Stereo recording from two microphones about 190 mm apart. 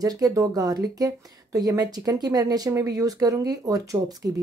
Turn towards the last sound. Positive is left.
turn(degrees=-20)  # may be behind; listen again after turning